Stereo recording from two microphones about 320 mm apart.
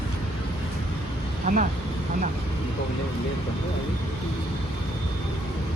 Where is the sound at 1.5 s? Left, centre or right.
Right.